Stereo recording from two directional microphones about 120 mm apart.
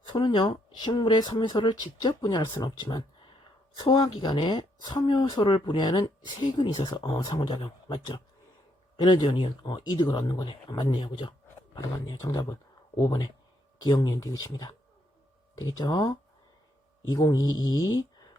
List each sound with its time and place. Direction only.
0.0 s speech: 45° left (ahead or behind)
12.2 s speech: 30° left (ahead or behind)
13.8 s speech: 35° left (ahead or behind)
17.1 s speech: 30° left (ahead or behind)